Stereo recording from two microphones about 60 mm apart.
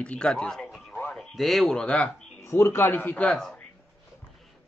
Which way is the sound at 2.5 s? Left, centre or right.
Left.